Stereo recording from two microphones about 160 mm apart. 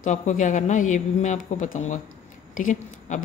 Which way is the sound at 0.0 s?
50° left (ahead or behind).